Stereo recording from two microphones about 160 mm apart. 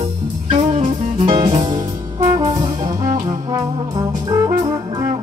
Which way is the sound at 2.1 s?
20° right (ahead or behind).